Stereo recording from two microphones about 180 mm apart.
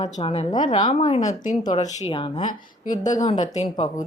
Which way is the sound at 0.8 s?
40° left (ahead or behind).